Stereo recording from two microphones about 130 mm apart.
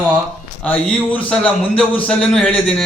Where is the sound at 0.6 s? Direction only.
5° left (ahead or behind).